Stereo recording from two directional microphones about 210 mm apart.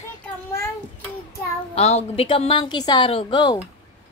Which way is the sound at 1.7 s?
30° left (ahead or behind).